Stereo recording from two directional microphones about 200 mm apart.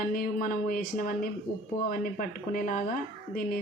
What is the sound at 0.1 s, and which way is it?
Speech, 45° left (ahead or behind).